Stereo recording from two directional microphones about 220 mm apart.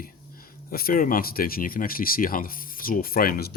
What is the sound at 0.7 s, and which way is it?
Speech, 40° left (ahead or behind).